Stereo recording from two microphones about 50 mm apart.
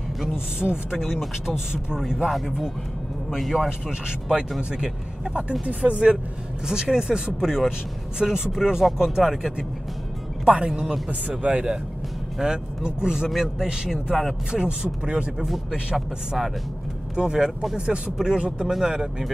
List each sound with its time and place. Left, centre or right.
0.6 s speech: centre
0.9 s a man's voice: centre
4.6 s speech: centre
5.7 s speech: right
6.7 s speech: centre
10.5 s speech: right
11.1 s speech: right
12.4 s speech: centre
15.4 s a man's voice: centre
17.1 s speech: centre